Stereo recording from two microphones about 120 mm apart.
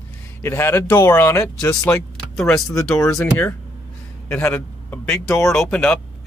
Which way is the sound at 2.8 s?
25° left (ahead or behind).